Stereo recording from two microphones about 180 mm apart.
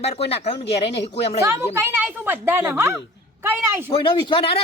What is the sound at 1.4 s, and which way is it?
A woman's voice, 15° right (ahead or behind).